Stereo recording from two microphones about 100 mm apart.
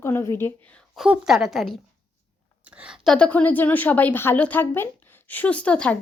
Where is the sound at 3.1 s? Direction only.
10° left (ahead or behind).